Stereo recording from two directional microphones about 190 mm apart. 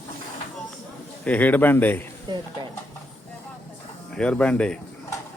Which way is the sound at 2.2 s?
25° right (ahead or behind).